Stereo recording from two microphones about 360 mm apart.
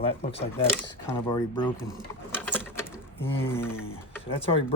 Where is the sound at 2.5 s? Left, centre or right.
Centre.